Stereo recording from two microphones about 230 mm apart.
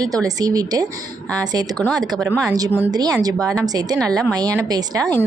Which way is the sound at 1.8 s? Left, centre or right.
Centre.